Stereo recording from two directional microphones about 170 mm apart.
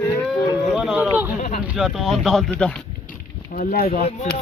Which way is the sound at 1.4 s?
50° left (ahead or behind).